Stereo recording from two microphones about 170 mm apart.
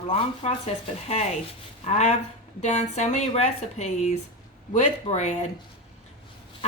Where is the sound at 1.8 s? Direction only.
40° left (ahead or behind).